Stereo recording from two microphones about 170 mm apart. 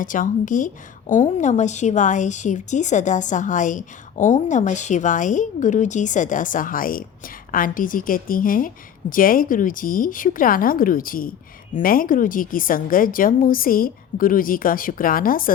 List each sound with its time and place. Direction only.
0.0 s a woman's voice: 50° left (ahead or behind)